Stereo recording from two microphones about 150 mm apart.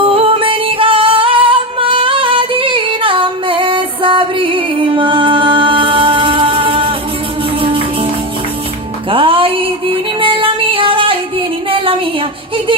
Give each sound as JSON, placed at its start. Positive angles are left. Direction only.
{"t": 0.0, "sound": "music", "side_deg": -35}
{"t": 9.0, "sound": "music", "side_deg": -35}